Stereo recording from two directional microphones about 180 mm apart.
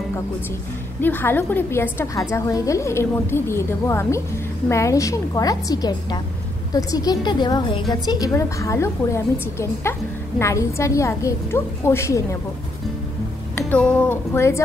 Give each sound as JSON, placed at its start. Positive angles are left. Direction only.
{"t": 1.0, "sound": "a woman's voice", "side_deg": 10}
{"t": 13.6, "sound": "a woman's voice", "side_deg": 5}